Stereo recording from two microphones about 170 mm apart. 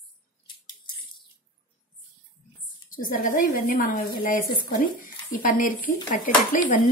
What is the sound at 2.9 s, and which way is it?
Speech, 55° left (ahead or behind).